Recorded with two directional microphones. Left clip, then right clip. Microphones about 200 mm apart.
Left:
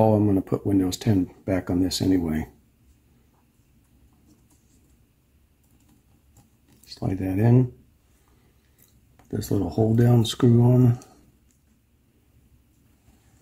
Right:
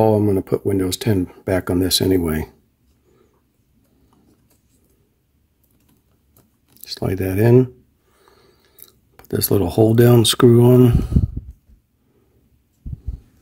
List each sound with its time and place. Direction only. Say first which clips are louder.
0.0 s speech: right 4 dB; 35° right (ahead or behind); by 2.5 s 50° right (ahead or behind)
6.8 s speech: right 7 dB; 50° right (ahead or behind)
9.1 s speech: right 9 dB; 45° right (ahead or behind)